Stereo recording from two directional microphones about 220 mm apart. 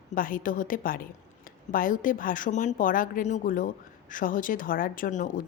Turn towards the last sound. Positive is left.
turn(degrees=35)  # may be behind; listen again after turning